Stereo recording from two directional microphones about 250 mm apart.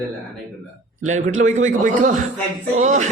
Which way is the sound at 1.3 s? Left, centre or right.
Right.